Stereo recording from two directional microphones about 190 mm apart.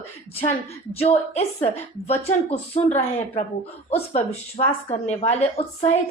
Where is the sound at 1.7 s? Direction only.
30° left (ahead or behind).